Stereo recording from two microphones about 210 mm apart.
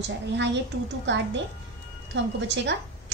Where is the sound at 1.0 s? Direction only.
60° right (ahead or behind).